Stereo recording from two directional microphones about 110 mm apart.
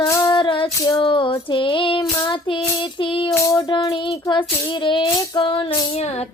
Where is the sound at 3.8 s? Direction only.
50° left (ahead or behind).